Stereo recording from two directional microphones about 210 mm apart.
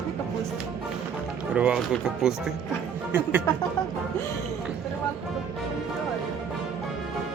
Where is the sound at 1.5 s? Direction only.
5° right (ahead or behind).